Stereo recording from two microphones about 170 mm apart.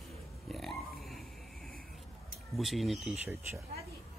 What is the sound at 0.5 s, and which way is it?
Grunt, centre (ahead or behind).